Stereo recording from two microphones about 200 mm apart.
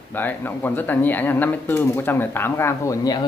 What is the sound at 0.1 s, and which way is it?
Speech, 10° left (ahead or behind).